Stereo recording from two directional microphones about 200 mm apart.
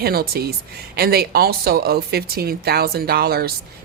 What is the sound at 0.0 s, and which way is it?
Speech, 50° right (ahead or behind).